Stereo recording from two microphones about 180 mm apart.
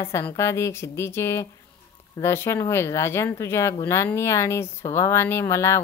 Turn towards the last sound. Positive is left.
turn(degrees=15)  # may be behind; listen again after turning